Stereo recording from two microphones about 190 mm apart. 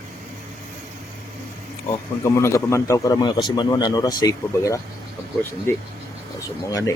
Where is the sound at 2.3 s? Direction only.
15° left (ahead or behind).